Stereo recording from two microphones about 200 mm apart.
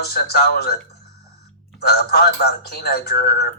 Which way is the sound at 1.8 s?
50° left (ahead or behind).